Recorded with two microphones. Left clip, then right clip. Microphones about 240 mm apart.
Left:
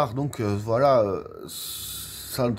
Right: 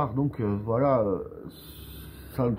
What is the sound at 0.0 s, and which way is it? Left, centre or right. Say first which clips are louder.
Speech: left 3 dB; left.